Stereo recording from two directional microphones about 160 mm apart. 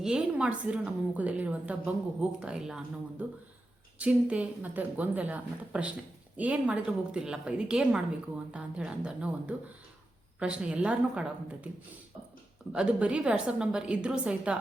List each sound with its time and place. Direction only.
0.0 s a woman's voice: 5° right (ahead or behind)
12.7 s a woman's voice: 5° right (ahead or behind)